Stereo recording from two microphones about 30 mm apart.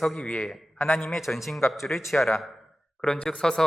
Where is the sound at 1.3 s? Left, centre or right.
Centre.